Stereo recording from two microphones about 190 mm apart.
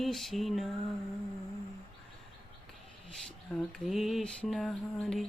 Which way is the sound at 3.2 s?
5° left (ahead or behind).